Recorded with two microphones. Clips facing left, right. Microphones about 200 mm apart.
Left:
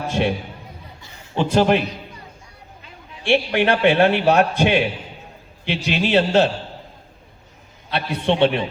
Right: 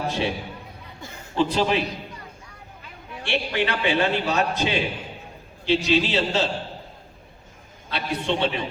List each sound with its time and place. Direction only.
0.1 s a man's voice: 60° left (ahead or behind)
1.4 s a man's voice: 55° left (ahead or behind)
3.2 s a man's voice: 60° left (ahead or behind)
7.9 s a man's voice: 60° left (ahead or behind)